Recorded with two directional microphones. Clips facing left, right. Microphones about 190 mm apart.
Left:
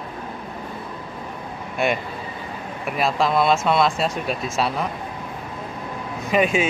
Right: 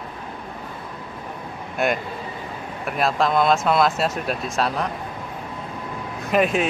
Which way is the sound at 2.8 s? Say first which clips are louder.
Even; centre (ahead or behind).